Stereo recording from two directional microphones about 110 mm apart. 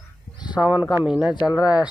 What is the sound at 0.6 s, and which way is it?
Speech, 10° right (ahead or behind).